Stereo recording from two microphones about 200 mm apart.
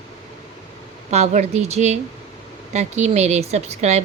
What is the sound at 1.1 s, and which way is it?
Speech, 35° right (ahead or behind).